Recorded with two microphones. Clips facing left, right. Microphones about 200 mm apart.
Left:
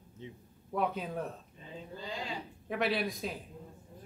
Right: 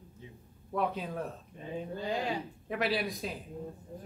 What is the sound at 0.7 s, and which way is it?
Speech, centre (ahead or behind).